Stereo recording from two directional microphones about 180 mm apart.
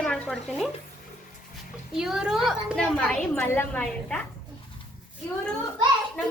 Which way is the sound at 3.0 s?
10° left (ahead or behind).